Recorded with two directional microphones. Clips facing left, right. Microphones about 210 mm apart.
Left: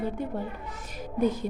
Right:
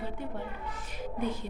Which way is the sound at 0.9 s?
40° left (ahead or behind).